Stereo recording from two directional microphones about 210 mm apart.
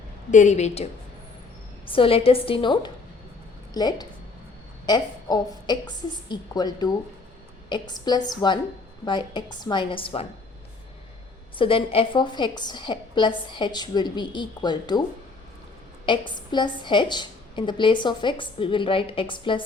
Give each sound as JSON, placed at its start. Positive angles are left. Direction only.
{"t": 0.3, "sound": "speech", "side_deg": 35}
{"t": 1.9, "sound": "a woman's voice", "side_deg": 25}
{"t": 11.5, "sound": "a woman's voice", "side_deg": 25}
{"t": 16.0, "sound": "a woman's voice", "side_deg": 20}